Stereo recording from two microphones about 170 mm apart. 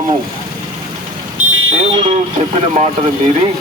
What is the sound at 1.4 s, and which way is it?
Vehicle, 45° right (ahead or behind).